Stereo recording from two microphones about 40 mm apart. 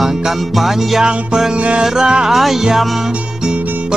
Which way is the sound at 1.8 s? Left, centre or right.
Centre.